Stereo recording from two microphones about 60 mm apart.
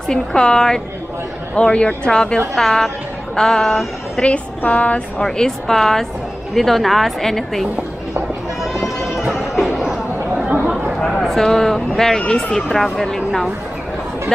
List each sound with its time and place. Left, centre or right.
0.1 s speech: centre
4.2 s speech: left
5.2 s speech: centre
10.3 s chatter: right
11.1 s speech: centre